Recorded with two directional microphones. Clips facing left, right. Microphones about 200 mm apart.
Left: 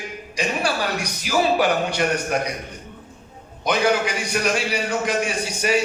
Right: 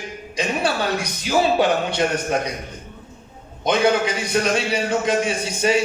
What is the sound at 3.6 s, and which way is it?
A man's voice, 25° right (ahead or behind).